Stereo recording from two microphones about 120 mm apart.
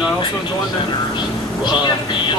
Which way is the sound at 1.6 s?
40° left (ahead or behind).